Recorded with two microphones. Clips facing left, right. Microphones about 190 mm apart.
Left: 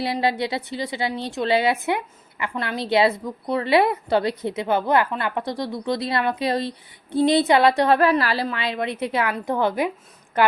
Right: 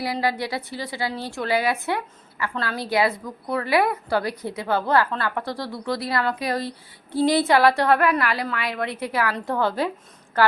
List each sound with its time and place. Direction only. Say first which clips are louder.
0.0 s a woman's voice: left 2 dB; 25° left (ahead or behind)